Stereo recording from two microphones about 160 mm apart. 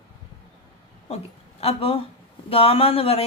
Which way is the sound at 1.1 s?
40° left (ahead or behind).